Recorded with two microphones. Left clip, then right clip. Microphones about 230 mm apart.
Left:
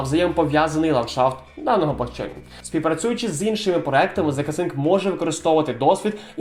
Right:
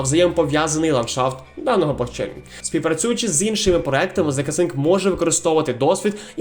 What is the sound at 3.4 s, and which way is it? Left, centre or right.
Speech, right.